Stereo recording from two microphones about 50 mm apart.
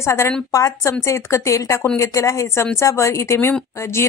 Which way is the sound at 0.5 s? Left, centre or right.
Left.